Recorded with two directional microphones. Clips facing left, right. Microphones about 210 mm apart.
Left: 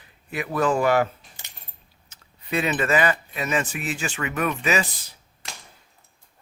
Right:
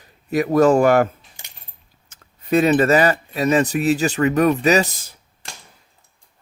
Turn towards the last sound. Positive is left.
turn(degrees=-40)  # may be behind; listen again after turning